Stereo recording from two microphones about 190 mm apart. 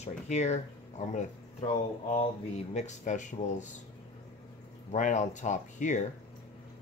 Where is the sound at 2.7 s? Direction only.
40° left (ahead or behind).